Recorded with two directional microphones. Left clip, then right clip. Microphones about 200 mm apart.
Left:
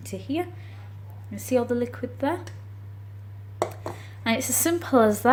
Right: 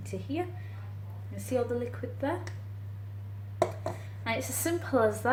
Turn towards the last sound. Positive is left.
turn(degrees=40)  # may be behind; listen again after turning